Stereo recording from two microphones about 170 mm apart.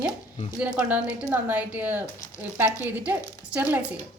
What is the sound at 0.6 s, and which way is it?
A woman's voice, 10° right (ahead or behind).